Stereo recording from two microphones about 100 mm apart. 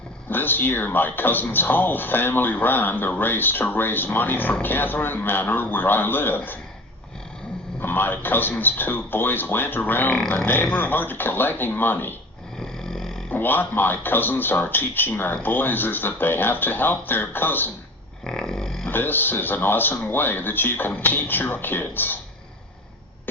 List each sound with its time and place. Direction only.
0.3 s a man's voice: 20° left (ahead or behind)
7.8 s a man's voice: 20° left (ahead or behind)
12.5 s a sound: 5° left (ahead or behind)
13.3 s a man's voice: 20° left (ahead or behind)
18.3 s a sound: 5° left (ahead or behind)
18.9 s a man's voice: 20° left (ahead or behind)